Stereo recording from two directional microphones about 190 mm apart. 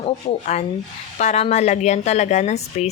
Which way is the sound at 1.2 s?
35° left (ahead or behind).